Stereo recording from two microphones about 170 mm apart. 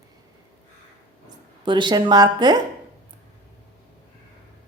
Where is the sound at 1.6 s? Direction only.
30° right (ahead or behind).